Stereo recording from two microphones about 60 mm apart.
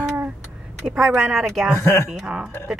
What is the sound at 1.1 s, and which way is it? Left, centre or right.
Speech, centre.